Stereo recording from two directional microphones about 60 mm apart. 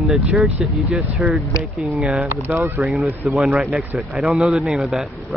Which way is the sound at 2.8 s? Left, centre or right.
Centre.